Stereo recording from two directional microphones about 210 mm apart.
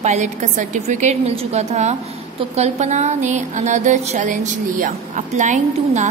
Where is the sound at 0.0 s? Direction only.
35° right (ahead or behind).